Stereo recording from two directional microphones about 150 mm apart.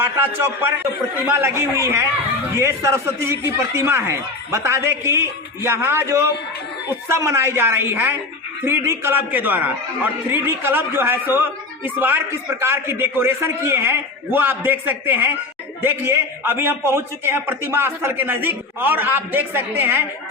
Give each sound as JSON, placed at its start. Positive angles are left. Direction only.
{"t": 1.3, "sound": "a man's voice", "side_deg": -15}